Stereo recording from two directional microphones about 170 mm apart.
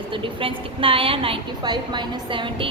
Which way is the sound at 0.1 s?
30° right (ahead or behind).